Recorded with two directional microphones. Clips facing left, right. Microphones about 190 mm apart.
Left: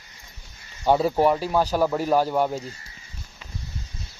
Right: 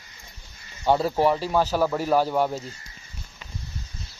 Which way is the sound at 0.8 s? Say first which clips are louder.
Left 1 dB; 5° left (ahead or behind).